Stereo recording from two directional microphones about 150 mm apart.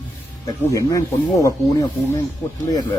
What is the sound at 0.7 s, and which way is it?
Speech, 25° left (ahead or behind).